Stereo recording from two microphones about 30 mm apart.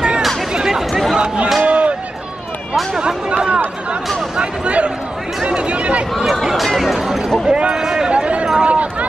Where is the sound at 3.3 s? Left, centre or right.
Right.